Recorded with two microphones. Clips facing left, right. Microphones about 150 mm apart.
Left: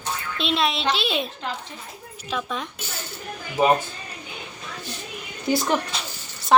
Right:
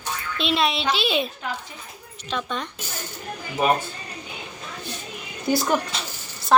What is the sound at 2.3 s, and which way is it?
Speech, 5° left (ahead or behind).